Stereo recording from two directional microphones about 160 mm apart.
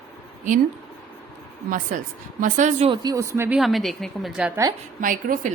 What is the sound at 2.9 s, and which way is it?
Speech, 25° right (ahead or behind).